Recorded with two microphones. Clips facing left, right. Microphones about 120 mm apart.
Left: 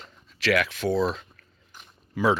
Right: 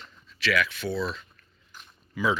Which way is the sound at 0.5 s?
80° left.